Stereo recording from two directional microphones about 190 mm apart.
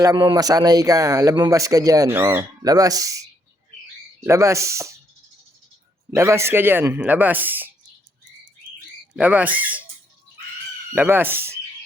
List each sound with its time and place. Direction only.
0.0 s speech: 20° right (ahead or behind)
6.1 s speech: 15° right (ahead or behind)
9.1 s speech: 10° right (ahead or behind)
10.9 s speech: 10° right (ahead or behind)